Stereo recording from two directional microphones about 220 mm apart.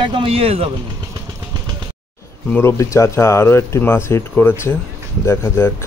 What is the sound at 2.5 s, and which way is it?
Speech, 10° left (ahead or behind).